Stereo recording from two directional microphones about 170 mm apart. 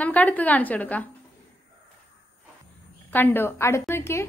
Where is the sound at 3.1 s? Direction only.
10° left (ahead or behind).